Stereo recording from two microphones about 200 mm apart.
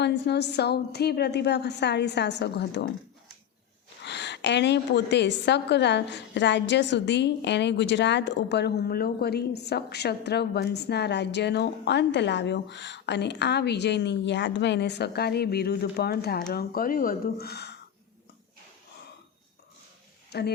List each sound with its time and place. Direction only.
0.0 s a woman's voice: 60° left (ahead or behind)
4.0 s a woman's voice: 60° left (ahead or behind)
20.3 s speech: 55° left (ahead or behind)